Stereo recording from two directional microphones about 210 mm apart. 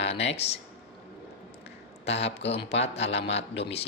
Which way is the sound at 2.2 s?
30° left (ahead or behind).